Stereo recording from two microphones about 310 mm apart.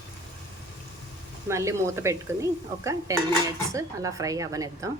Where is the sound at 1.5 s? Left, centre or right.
Centre.